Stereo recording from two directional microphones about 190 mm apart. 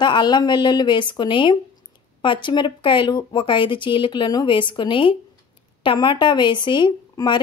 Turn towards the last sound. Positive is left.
turn(degrees=25)  # may be behind; listen again after turning